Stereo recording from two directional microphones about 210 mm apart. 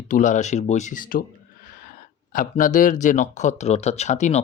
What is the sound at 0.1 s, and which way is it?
Speech, 35° left (ahead or behind).